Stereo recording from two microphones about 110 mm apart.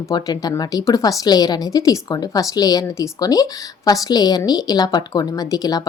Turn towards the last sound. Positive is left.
turn(degrees=35)  # may be behind; listen again after turning